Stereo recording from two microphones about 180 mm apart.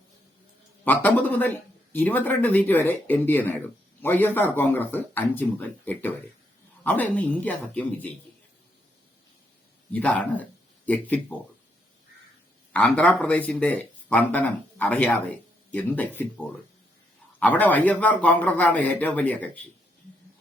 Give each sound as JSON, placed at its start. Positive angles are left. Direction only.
{"t": 0.9, "sound": "speech", "side_deg": 10}
{"t": 9.9, "sound": "speech", "side_deg": 10}
{"t": 12.7, "sound": "speech", "side_deg": 5}
{"t": 17.4, "sound": "speech", "side_deg": 10}